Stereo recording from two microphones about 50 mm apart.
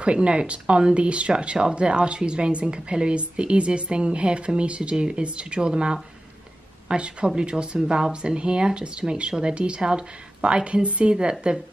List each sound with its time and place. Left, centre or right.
0.0 s speech: right